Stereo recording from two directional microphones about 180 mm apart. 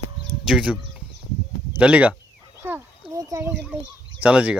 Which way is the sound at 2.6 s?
15° right (ahead or behind).